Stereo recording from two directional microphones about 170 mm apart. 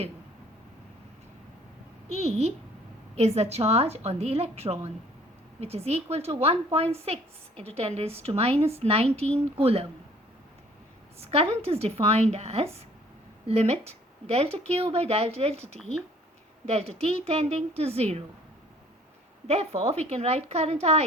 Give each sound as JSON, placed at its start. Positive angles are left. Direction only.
{"t": 2.1, "sound": "a woman's voice", "side_deg": -40}
{"t": 11.2, "sound": "a woman's voice", "side_deg": -35}
{"t": 19.5, "sound": "a woman's voice", "side_deg": -35}